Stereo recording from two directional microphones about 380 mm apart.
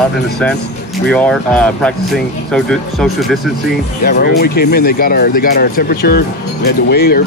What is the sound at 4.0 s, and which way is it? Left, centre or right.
Speech, left.